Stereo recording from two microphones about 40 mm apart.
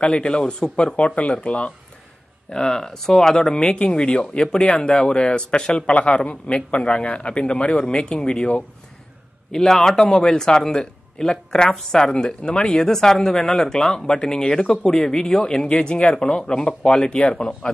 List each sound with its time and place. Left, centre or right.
0.0 s speech: left
2.5 s speech: centre
4.6 s speech: left
9.5 s speech: centre; by 17.6 s left